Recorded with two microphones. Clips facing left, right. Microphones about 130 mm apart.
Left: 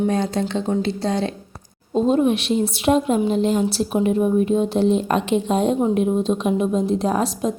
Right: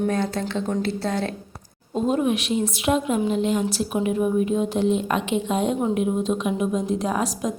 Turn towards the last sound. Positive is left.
turn(degrees=30)  # may be behind; listen again after turning